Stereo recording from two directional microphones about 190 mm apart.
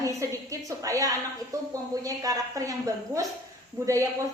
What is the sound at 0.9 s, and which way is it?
A woman's voice, 15° right (ahead or behind).